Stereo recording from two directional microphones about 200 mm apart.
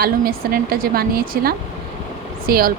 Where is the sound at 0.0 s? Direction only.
45° right (ahead or behind).